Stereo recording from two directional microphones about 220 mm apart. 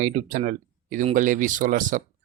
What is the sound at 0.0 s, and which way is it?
Speech, 35° right (ahead or behind).